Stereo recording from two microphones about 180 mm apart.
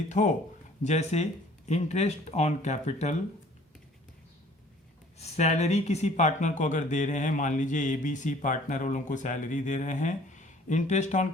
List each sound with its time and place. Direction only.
0.1 s speech: 40° left (ahead or behind)
5.1 s speech: 35° left (ahead or behind)